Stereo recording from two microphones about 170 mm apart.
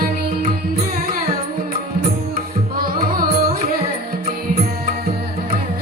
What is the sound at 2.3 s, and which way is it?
Music, 60° right (ahead or behind).